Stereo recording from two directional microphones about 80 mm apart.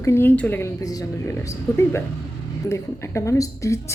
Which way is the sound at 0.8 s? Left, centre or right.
Left.